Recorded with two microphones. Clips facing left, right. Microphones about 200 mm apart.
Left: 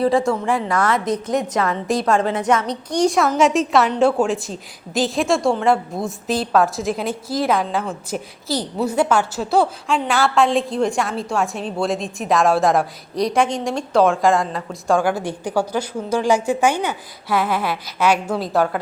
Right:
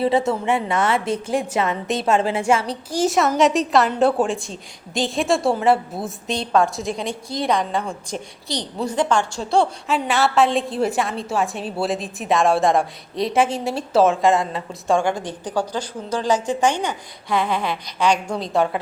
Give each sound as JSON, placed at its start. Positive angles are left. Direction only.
{"t": 0.0, "sound": "a woman's voice", "side_deg": -25}
{"t": 2.9, "sound": "a woman's voice", "side_deg": -5}